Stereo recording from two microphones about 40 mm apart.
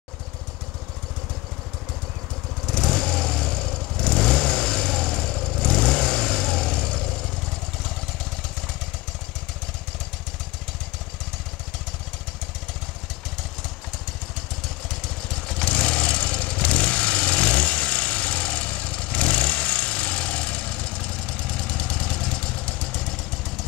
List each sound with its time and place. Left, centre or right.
2.6 s vehicle: centre
14.9 s vehicle: left